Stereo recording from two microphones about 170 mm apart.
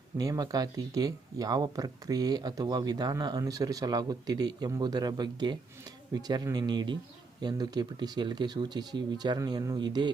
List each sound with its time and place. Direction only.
0.2 s speech: 20° right (ahead or behind)